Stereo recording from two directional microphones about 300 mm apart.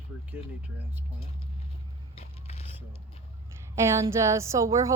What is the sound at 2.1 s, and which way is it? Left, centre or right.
Vehicle, left.